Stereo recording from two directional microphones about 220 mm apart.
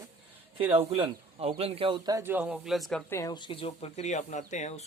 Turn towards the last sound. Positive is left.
turn(degrees=30)  # may be behind; listen again after turning